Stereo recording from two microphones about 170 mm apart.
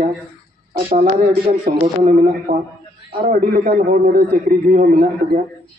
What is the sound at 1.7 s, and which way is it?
A man's voice, 55° right (ahead or behind).